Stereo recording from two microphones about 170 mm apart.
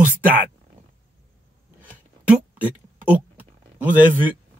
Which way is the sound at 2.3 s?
10° right (ahead or behind).